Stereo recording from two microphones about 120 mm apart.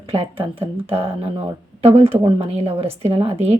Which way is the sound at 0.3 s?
15° right (ahead or behind).